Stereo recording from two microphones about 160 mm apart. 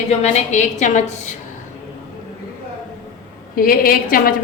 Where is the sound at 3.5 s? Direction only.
65° left (ahead or behind).